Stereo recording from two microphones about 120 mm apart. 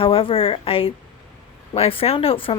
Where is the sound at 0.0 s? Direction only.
50° left (ahead or behind).